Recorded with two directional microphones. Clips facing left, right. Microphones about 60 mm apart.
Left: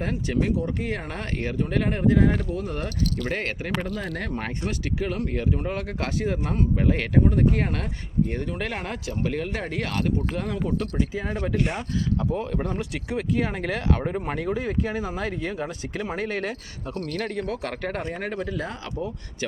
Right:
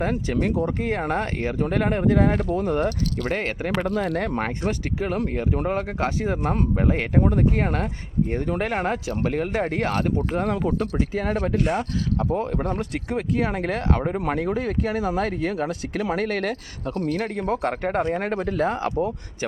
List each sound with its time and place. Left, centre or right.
0.0 s speech: right
3.2 s speech: right
3.8 s speech: right
4.4 s speech: right
6.9 s speech: right
10.3 s speech: right
12.3 s speech: right
14.1 s speech: right
14.4 s speech: right
17.5 s speech: right